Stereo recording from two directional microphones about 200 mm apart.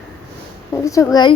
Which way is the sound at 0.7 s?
15° left (ahead or behind).